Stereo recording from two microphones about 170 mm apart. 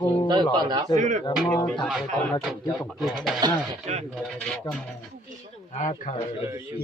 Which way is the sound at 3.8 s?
40° right (ahead or behind).